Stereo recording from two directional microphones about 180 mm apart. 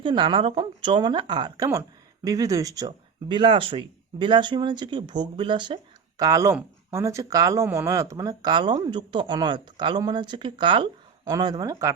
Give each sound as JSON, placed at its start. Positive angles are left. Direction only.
{"t": 0.0, "sound": "speech", "side_deg": -25}